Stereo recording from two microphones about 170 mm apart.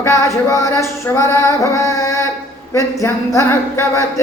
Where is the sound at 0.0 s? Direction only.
20° left (ahead or behind).